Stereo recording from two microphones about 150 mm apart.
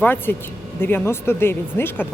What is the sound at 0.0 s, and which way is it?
Speech, 10° left (ahead or behind).